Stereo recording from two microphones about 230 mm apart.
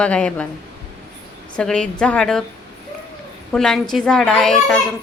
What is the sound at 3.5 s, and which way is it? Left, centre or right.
A woman's voice, centre.